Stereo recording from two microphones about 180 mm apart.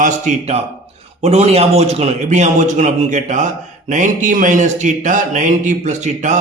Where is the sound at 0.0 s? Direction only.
40° right (ahead or behind).